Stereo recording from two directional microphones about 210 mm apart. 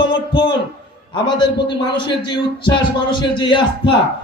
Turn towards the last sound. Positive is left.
turn(degrees=20)  # may be behind; listen again after turning